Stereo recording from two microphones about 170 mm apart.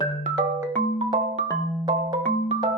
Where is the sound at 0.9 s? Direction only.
35° right (ahead or behind).